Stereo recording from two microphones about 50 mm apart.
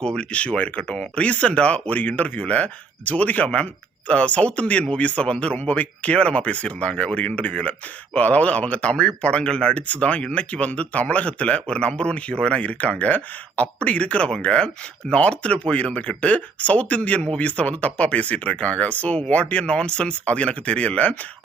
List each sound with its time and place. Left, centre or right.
0.0 s speech: centre
5.5 s speech: left